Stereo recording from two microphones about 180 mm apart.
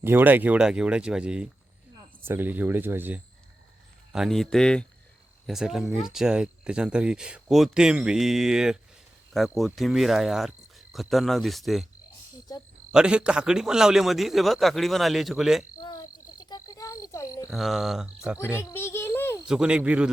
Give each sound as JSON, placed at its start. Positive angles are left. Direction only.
{"t": 0.0, "sound": "speech", "side_deg": -10}
{"t": 4.1, "sound": "speech", "side_deg": 0}
{"t": 12.9, "sound": "speech", "side_deg": -5}
{"t": 15.8, "sound": "a sound", "side_deg": 20}
{"t": 17.5, "sound": "speech", "side_deg": 0}
{"t": 18.7, "sound": "a sound", "side_deg": 15}
{"t": 19.5, "sound": "speech", "side_deg": -5}